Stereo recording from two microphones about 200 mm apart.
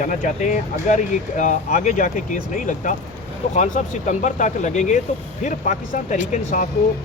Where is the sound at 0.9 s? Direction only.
35° left (ahead or behind).